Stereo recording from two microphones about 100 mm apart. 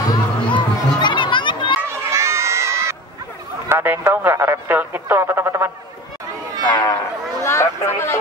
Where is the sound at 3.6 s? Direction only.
20° right (ahead or behind).